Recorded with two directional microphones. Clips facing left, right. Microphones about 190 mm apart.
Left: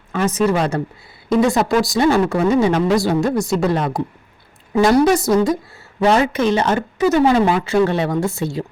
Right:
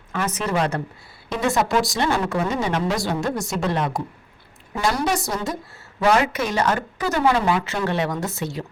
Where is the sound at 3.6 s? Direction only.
40° left (ahead or behind).